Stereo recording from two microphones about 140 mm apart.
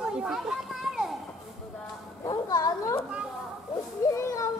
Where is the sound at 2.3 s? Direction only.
25° left (ahead or behind).